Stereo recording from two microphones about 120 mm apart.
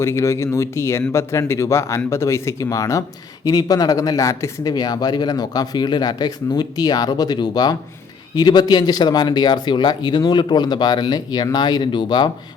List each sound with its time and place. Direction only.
0.0 s speech: 25° left (ahead or behind); by 12.3 s 40° left (ahead or behind)